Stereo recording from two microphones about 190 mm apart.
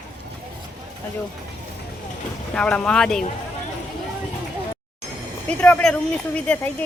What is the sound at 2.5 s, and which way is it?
Speech, 5° left (ahead or behind).